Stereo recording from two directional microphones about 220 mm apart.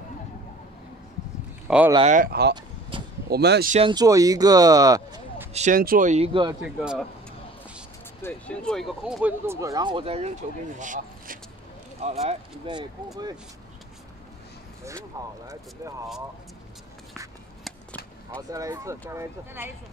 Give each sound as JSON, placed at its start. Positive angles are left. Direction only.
{"t": 1.7, "sound": "speech", "side_deg": -5}
{"t": 2.3, "sound": "speech", "side_deg": -45}
{"t": 3.7, "sound": "speech", "side_deg": -20}
{"t": 5.5, "sound": "speech", "side_deg": -35}
{"t": 6.6, "sound": "speech", "side_deg": -5}
{"t": 8.2, "sound": "speech", "side_deg": 5}
{"t": 15.2, "sound": "speech", "side_deg": -15}
{"t": 18.5, "sound": "speech", "side_deg": -15}